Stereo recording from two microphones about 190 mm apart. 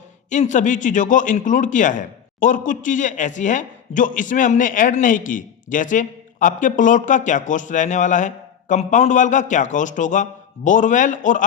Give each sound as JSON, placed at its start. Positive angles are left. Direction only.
{"t": 0.3, "sound": "a man's voice", "side_deg": 40}